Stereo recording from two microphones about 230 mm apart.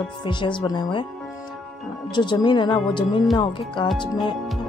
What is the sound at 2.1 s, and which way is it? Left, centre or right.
Speech, centre.